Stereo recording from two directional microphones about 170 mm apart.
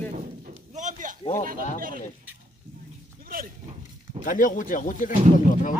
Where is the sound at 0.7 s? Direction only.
45° right (ahead or behind).